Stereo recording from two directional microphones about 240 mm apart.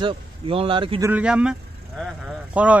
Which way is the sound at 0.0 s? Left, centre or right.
Right.